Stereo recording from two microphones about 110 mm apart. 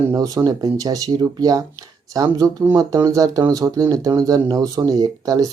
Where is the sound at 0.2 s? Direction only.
35° right (ahead or behind).